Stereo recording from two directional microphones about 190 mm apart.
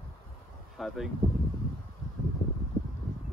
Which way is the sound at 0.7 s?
Centre (ahead or behind).